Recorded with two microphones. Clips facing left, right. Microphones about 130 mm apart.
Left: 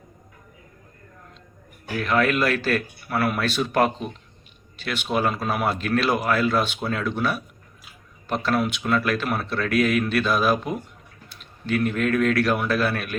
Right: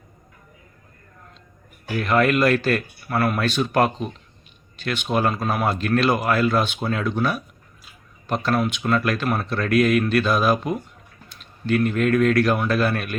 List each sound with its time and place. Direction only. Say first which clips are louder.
1.9 s speech: right 2 dB; 5° right (ahead or behind)